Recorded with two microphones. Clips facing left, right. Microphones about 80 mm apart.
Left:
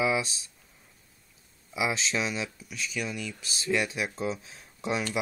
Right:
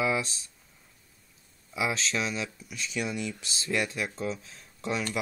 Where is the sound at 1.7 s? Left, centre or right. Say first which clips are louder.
Left 1 dB; centre.